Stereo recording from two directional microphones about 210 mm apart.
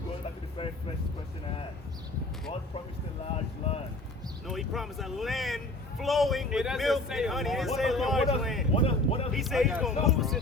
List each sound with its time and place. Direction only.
0.6 s vehicle: 25° left (ahead or behind)
4.4 s a man's voice: centre (ahead or behind)
8.7 s a sound: 25° left (ahead or behind)
9.3 s a man's voice: centre (ahead or behind)